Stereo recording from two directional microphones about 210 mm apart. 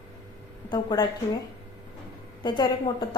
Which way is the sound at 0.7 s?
20° left (ahead or behind).